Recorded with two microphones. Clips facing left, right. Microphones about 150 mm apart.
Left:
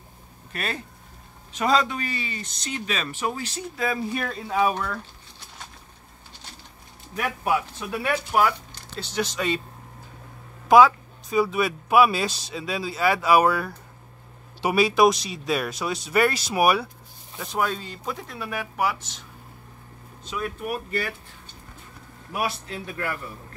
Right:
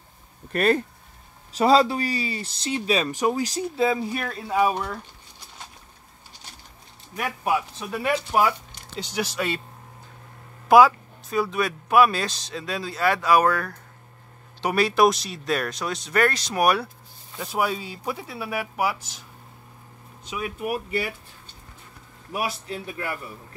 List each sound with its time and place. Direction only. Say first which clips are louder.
0.5 s speech: right 11 dB; 50° right (ahead or behind)
1.5 s speech: right 4 dB; 30° right (ahead or behind)
4.0 s speech: left 1 dB; 5° right (ahead or behind)
7.2 s speech: even; centre (ahead or behind)
10.7 s speech: even; 5° right (ahead or behind)
17.4 s speech: right 1 dB; 5° right (ahead or behind)
20.2 s speech: right 1 dB; 10° right (ahead or behind)